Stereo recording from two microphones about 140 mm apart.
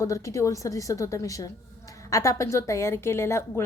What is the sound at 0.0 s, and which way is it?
A woman's voice, 25° left (ahead or behind).